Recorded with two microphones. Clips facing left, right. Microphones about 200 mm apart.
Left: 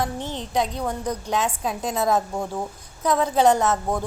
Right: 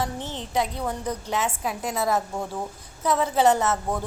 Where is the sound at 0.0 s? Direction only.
15° left (ahead or behind).